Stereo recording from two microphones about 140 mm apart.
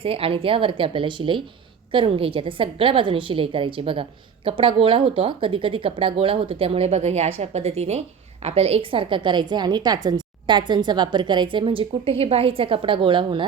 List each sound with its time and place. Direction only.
0.0 s a woman's voice: 40° right (ahead or behind)